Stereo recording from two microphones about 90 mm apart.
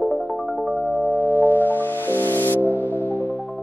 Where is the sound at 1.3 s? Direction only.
20° left (ahead or behind).